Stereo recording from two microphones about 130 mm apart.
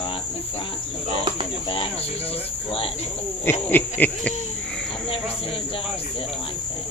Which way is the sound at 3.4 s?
15° left (ahead or behind).